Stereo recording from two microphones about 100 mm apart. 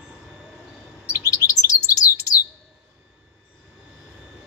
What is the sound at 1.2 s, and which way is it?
Bird, 35° left (ahead or behind).